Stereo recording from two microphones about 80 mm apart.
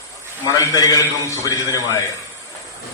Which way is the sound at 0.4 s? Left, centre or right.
Left.